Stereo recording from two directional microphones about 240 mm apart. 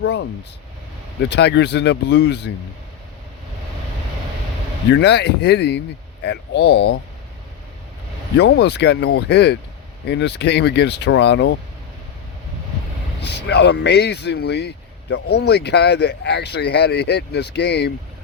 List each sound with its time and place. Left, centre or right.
0.0 s speech: left
1.3 s speech: left
4.9 s speech: left
8.4 s speech: left
13.2 s speech: left